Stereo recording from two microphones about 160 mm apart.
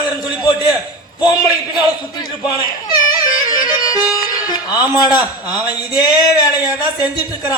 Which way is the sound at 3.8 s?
25° left (ahead or behind).